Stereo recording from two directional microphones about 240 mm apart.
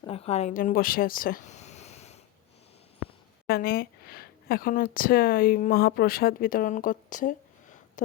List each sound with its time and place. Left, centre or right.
0.0 s speech: left
3.4 s speech: left